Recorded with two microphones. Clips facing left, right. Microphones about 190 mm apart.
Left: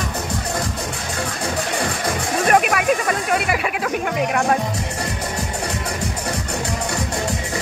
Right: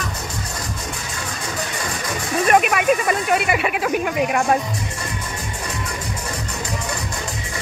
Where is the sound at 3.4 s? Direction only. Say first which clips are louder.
Right 1 dB; centre (ahead or behind).